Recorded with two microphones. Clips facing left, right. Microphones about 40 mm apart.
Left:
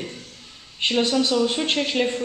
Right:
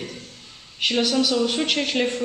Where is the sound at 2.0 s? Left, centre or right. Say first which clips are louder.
Even; centre.